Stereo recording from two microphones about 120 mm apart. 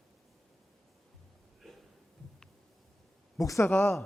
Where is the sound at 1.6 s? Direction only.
5° left (ahead or behind).